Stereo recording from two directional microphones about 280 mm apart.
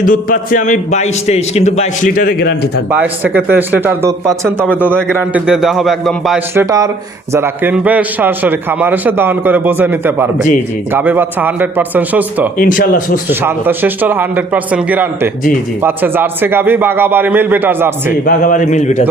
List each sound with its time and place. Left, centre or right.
0.0 s a man's voice: left
2.9 s a man's voice: centre
12.5 s speech: left
13.4 s a man's voice: centre
18.3 s a man's voice: left